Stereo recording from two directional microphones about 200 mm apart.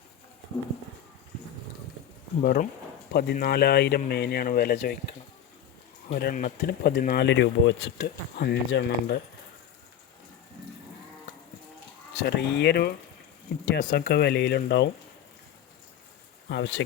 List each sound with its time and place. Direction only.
2.4 s speech: 45° left (ahead or behind)
6.1 s speech: 50° left (ahead or behind)
12.1 s speech: 55° left (ahead or behind)
16.5 s speech: 60° left (ahead or behind)